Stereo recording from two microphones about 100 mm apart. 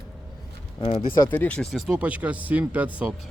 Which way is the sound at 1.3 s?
15° left (ahead or behind).